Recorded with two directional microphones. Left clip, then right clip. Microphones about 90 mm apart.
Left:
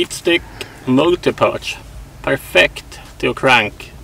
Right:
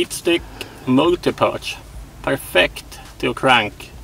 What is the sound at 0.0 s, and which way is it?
Speech, 5° right (ahead or behind).